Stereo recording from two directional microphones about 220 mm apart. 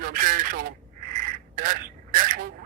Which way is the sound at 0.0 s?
40° right (ahead or behind).